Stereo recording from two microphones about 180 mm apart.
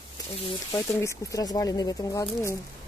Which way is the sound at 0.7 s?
15° left (ahead or behind).